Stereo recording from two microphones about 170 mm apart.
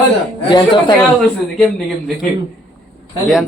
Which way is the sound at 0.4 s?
25° left (ahead or behind).